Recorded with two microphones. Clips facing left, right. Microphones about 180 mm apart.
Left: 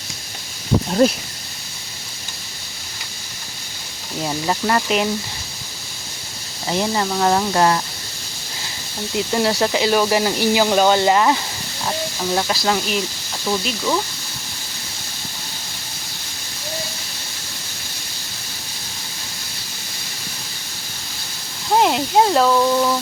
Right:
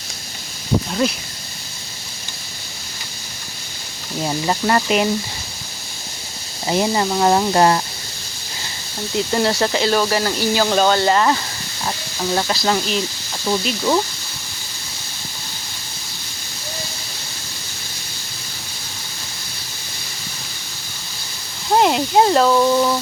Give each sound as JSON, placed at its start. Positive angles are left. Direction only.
{"t": 0.9, "sound": "speech", "side_deg": 40}
{"t": 4.2, "sound": "speech", "side_deg": -5}
{"t": 6.7, "sound": "speech", "side_deg": -15}
{"t": 7.5, "sound": "speech", "side_deg": -30}
{"t": 9.1, "sound": "speech", "side_deg": 5}
{"t": 12.3, "sound": "speech", "side_deg": 0}
{"t": 21.8, "sound": "speech", "side_deg": 0}